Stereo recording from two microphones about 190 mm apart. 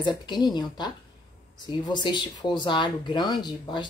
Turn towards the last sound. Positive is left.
turn(degrees=20)  # may be behind; listen again after turning